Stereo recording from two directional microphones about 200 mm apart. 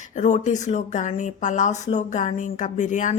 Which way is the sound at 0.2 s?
35° left (ahead or behind).